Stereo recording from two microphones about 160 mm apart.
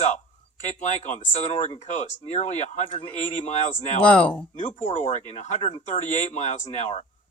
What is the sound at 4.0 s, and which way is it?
Speech, 10° left (ahead or behind).